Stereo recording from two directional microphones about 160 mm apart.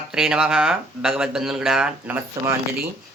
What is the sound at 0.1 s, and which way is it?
Speech, 5° right (ahead or behind).